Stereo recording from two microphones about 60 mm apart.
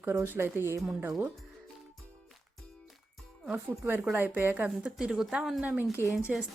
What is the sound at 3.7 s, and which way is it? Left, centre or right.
Speech, right.